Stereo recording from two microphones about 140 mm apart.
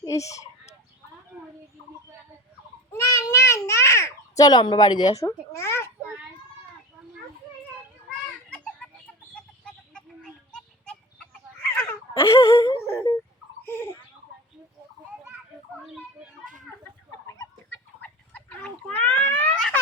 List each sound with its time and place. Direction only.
0.0 s fowl: 20° left (ahead or behind)
2.9 s a sound: 20° left (ahead or behind)
3.7 s a child's voice: 20° left (ahead or behind)
5.2 s babbling: 20° left (ahead or behind)
8.4 s a sound: 10° left (ahead or behind)
9.3 s chicken: 5° left (ahead or behind)
10.5 s music: 5° left (ahead or behind)
11.7 s a sound: 15° left (ahead or behind)
17.2 s chicken: 20° left (ahead or behind)